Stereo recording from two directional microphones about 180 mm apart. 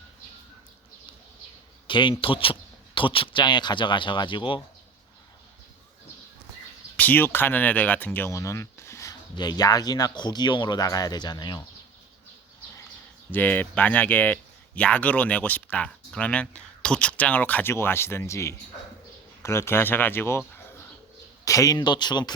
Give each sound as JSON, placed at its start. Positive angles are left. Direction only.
{"t": 1.9, "sound": "speech", "side_deg": 25}
{"t": 6.9, "sound": "speech", "side_deg": 10}
{"t": 13.3, "sound": "speech", "side_deg": 10}
{"t": 21.4, "sound": "speech", "side_deg": 20}